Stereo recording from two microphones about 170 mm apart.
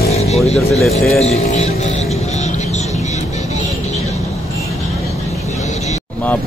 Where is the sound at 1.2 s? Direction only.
40° left (ahead or behind).